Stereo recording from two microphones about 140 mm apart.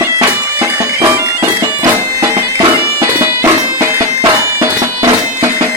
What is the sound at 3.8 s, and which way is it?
Bagpipes, 20° right (ahead or behind).